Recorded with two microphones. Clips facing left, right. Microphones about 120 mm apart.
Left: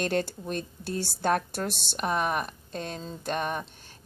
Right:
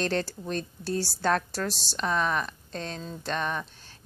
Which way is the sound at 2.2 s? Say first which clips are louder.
Even; 50° left (ahead or behind).